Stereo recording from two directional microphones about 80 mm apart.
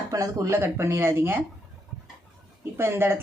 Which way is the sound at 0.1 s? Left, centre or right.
Right.